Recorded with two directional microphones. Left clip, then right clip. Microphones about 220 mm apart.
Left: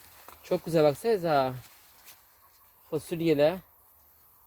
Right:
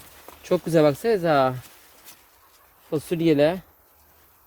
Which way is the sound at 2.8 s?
30° right (ahead or behind).